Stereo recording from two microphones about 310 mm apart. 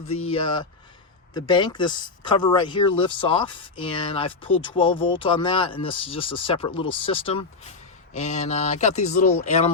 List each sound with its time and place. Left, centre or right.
0.3 s speech: centre